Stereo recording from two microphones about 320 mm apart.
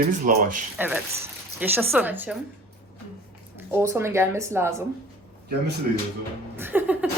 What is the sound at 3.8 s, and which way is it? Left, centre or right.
Speech, centre.